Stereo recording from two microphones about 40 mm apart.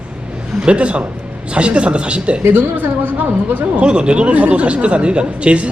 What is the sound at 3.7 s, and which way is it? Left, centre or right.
A man's voice, right.